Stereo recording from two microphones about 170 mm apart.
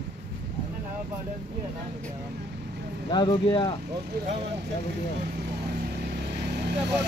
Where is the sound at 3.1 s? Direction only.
25° left (ahead or behind).